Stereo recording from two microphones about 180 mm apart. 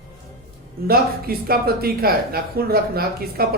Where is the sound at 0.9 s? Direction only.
55° right (ahead or behind).